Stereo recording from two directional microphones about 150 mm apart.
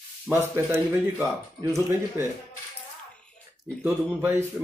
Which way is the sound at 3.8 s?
15° right (ahead or behind).